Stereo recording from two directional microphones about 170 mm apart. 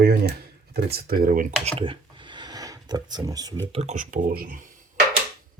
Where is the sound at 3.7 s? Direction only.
45° right (ahead or behind).